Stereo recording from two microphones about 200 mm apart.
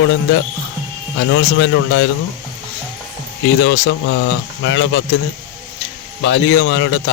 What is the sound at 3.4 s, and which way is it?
A man's voice, 65° left (ahead or behind).